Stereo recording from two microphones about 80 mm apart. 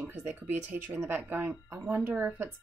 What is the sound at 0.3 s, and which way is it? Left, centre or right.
Speech, right.